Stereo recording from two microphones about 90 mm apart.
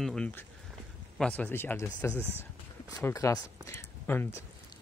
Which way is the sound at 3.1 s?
40° left (ahead or behind).